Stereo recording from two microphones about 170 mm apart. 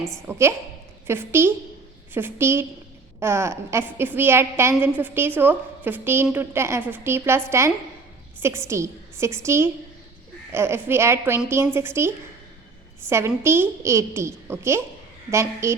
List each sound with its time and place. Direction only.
0.3 s a woman's voice: 15° right (ahead or behind)